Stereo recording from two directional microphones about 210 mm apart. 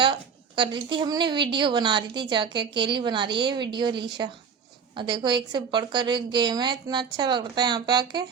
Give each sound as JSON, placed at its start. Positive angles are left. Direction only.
{"t": 0.0, "sound": "a woman's voice", "side_deg": -25}